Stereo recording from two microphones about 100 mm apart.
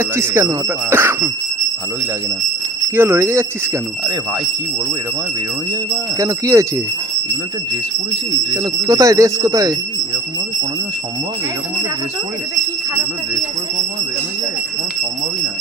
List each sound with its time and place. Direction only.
0.0 s speech: 25° right (ahead or behind)
2.9 s speech: 25° right (ahead or behind)
6.1 s speech: 30° right (ahead or behind)
8.5 s speech: 35° right (ahead or behind)